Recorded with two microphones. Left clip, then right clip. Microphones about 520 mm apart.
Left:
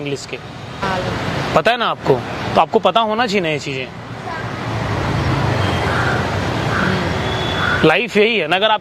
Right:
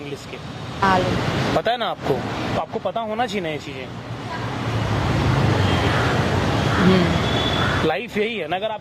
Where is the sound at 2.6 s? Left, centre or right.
Left.